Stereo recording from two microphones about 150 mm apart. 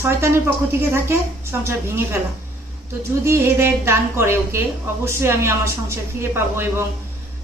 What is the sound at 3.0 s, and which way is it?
A woman's voice, 20° right (ahead or behind).